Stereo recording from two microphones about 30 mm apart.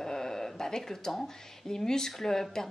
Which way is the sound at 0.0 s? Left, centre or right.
Centre.